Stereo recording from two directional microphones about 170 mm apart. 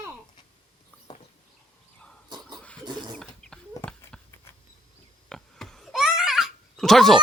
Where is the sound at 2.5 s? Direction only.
5° left (ahead or behind).